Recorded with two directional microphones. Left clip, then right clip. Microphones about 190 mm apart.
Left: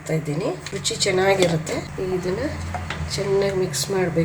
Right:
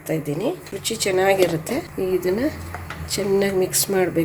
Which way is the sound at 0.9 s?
35° right (ahead or behind).